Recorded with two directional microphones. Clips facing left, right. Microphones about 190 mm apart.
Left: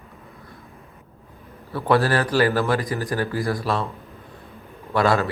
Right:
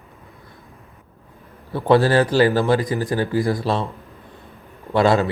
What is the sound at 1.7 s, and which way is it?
Speech, 25° right (ahead or behind).